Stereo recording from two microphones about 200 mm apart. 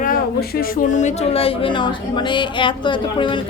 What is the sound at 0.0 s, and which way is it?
Speech, 45° left (ahead or behind).